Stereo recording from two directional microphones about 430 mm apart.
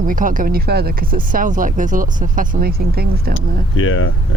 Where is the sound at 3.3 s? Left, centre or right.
Left.